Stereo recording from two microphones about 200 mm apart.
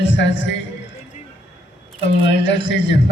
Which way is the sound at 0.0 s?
65° left (ahead or behind).